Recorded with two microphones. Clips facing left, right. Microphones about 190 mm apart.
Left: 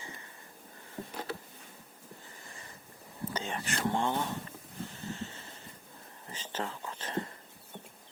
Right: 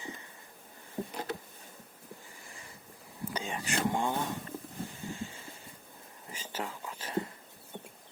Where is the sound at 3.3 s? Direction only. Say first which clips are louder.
Right 2 dB; 10° right (ahead or behind).